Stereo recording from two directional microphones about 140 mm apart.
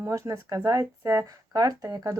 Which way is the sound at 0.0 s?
20° right (ahead or behind).